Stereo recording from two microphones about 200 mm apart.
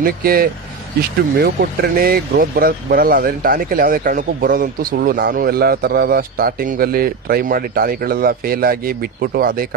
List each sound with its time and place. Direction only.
0.0 s speech: 50° right (ahead or behind)